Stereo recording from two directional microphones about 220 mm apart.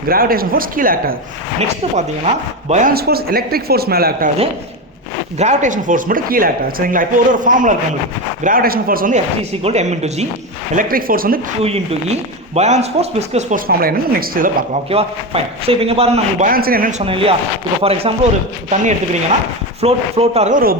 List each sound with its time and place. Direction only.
0.1 s speech: 40° right (ahead or behind)
1.5 s speech: 30° right (ahead or behind)
5.4 s speech: 35° right (ahead or behind)
10.8 s speech: 40° right (ahead or behind)
11.6 s a man's voice: 25° right (ahead or behind)
13.7 s speech: 45° right (ahead or behind)
14.8 s a man's voice: 25° right (ahead or behind)
16.5 s speech: 40° right (ahead or behind)
17.0 s a man's voice: 25° right (ahead or behind)
19.8 s a man's voice: 30° right (ahead or behind)